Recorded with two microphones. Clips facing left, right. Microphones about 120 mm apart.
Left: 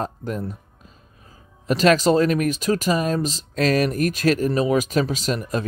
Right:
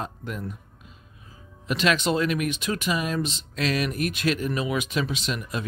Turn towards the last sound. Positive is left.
turn(degrees=40)  # may be behind; listen again after turning